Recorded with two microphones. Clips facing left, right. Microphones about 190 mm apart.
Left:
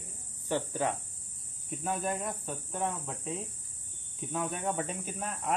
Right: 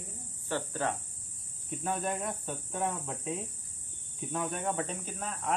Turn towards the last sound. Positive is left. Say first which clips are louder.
# left 1 dB
turn(degrees=5)  # may be behind; listen again after turning